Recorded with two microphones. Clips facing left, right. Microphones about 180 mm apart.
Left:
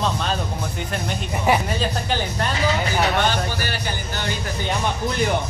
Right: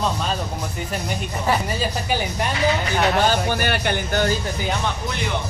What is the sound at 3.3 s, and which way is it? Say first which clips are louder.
Speech: right 3 dB; 55° right (ahead or behind).